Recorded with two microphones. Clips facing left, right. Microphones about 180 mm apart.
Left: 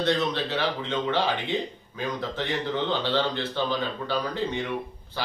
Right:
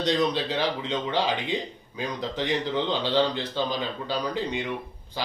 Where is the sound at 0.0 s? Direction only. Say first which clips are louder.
Right 1 dB; 15° right (ahead or behind).